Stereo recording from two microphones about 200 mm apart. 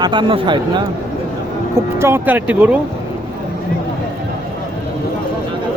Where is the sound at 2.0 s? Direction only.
10° right (ahead or behind).